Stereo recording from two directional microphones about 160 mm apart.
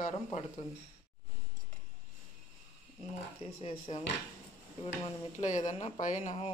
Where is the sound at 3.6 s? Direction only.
35° left (ahead or behind).